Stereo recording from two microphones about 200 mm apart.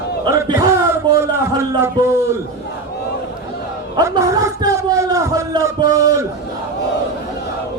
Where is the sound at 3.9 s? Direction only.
20° right (ahead or behind).